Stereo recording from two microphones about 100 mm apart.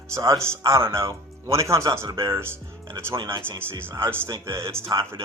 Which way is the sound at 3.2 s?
60° right (ahead or behind).